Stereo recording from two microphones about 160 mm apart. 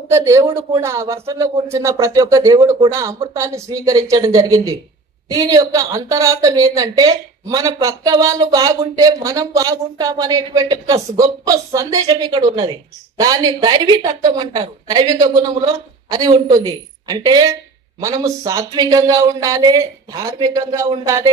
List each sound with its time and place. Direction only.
0.1 s a woman's voice: 15° right (ahead or behind)